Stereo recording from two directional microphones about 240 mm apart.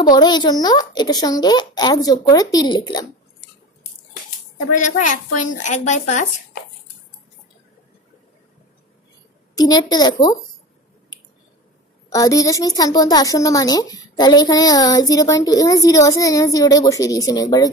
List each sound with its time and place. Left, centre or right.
0.1 s a woman's voice: centre
4.7 s speech: left
9.6 s a woman's voice: centre
12.1 s a woman's voice: centre